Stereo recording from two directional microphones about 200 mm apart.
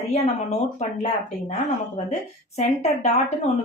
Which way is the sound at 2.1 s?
35° left (ahead or behind).